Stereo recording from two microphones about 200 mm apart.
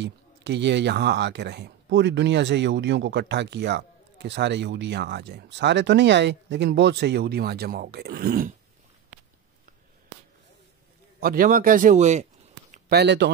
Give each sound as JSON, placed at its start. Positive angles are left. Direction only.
{"t": 0.0, "sound": "speech", "side_deg": -60}
{"t": 11.1, "sound": "a man's voice", "side_deg": -45}
{"t": 12.9, "sound": "speech", "side_deg": -60}